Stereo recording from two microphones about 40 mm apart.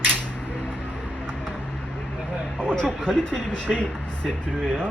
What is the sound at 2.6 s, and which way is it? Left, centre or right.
Speech, left.